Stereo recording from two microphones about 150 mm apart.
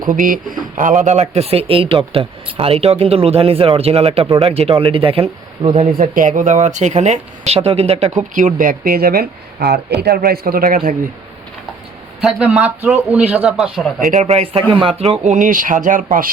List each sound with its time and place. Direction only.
0.1 s a man's voice: 60° right (ahead or behind); by 6.1 s 45° right (ahead or behind)
6.1 s speech: 60° right (ahead or behind)
12.2 s a man's voice: 10° right (ahead or behind)
14.1 s speech: 50° right (ahead or behind); by 16.3 s 65° right (ahead or behind)